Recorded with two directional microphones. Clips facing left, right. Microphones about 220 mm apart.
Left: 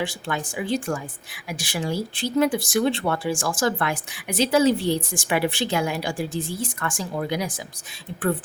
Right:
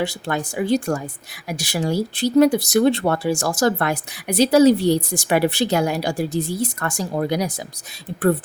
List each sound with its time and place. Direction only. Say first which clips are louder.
0.0 s speech: right 4 dB; 40° right (ahead or behind)